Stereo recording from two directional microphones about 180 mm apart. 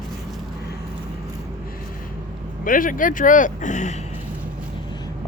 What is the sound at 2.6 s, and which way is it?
Speech, 50° left (ahead or behind).